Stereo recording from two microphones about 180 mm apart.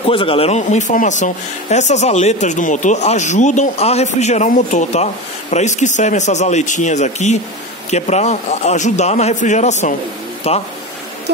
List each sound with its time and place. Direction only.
0.0 s speech: 30° left (ahead or behind)